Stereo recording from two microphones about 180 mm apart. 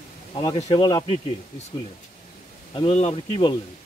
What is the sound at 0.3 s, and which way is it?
Speech, 25° left (ahead or behind).